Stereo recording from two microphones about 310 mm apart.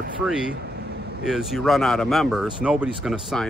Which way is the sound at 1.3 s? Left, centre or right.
Centre.